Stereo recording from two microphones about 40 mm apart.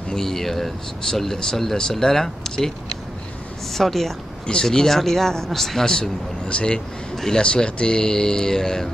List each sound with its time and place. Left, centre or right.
0.1 s speech: centre
3.7 s speech: centre